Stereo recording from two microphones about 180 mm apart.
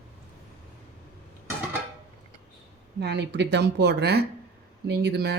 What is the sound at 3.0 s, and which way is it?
Speech, 70° right (ahead or behind).